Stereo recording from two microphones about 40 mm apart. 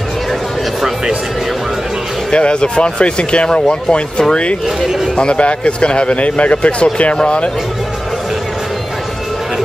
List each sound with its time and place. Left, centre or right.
2.3 s speech: left